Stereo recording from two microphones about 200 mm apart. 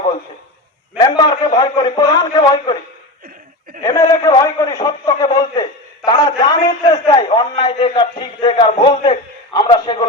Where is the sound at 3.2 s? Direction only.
45° right (ahead or behind).